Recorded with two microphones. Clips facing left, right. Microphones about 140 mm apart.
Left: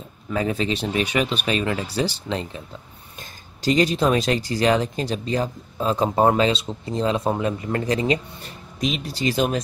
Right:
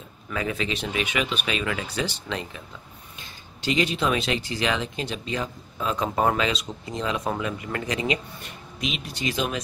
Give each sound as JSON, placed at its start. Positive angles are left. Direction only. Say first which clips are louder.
{"t": 0.3, "sound": "speech", "louder": "left 5 dB", "side_deg": 35}